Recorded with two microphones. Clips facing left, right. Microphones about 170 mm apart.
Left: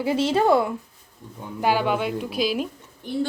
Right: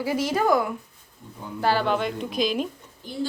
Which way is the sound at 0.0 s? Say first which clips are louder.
Left 3 dB; 25° left (ahead or behind).